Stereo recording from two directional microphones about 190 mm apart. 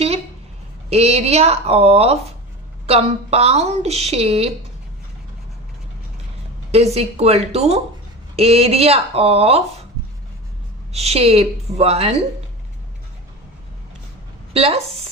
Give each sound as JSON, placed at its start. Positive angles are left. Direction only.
{"t": 0.9, "sound": "a woman's voice", "side_deg": -30}
{"t": 6.7, "sound": "a woman's voice", "side_deg": -35}
{"t": 10.9, "sound": "a woman's voice", "side_deg": -35}
{"t": 14.5, "sound": "a woman's voice", "side_deg": -30}